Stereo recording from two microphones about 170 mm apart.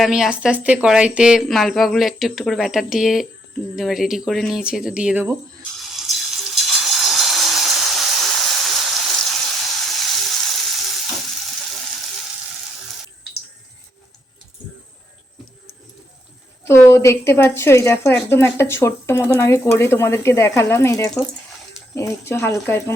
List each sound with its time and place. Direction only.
0.0 s speech: 5° right (ahead or behind)
5.8 s water: centre (ahead or behind)
16.6 s speech: 15° left (ahead or behind)